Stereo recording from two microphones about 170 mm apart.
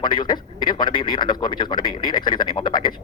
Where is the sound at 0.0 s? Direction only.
25° left (ahead or behind).